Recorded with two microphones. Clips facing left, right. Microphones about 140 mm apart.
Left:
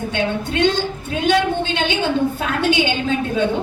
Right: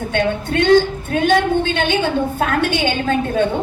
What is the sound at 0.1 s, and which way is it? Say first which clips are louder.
A woman's voice: right 4 dB; 55° right (ahead or behind).